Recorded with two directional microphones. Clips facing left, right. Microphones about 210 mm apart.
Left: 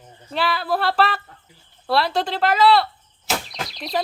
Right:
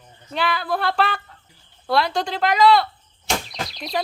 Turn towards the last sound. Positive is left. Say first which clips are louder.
# left 1 dB
turn(degrees=0)  # may be behind; listen again after turning